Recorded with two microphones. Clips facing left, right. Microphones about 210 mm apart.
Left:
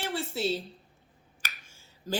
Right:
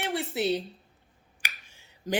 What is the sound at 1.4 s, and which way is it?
Finger snapping, 20° right (ahead or behind).